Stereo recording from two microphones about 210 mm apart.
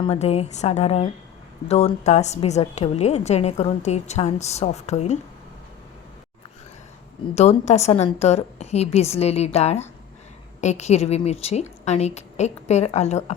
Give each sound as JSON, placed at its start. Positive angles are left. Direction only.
{"t": 0.0, "sound": "a woman's voice", "side_deg": 30}
{"t": 7.3, "sound": "a woman's voice", "side_deg": 30}